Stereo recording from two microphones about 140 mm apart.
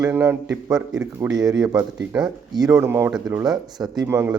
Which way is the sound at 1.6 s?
5° right (ahead or behind).